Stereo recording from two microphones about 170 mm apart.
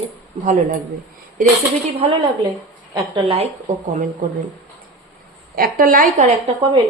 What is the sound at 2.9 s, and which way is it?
Speech, 30° right (ahead or behind).